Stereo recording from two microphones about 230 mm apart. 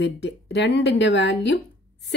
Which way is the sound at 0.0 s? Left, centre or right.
Left.